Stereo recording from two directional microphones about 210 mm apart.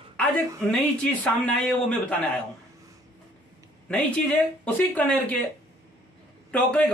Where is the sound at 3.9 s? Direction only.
5° left (ahead or behind).